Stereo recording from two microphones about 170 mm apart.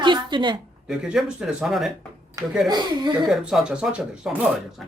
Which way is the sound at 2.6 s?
25° right (ahead or behind).